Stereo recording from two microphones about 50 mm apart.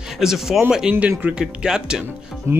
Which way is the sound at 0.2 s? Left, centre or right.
Centre.